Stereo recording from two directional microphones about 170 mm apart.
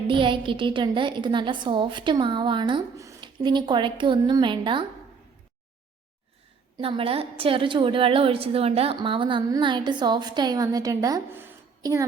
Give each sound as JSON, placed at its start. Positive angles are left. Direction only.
{"t": 0.1, "sound": "a woman's voice", "side_deg": -30}
{"t": 6.7, "sound": "a woman's voice", "side_deg": -30}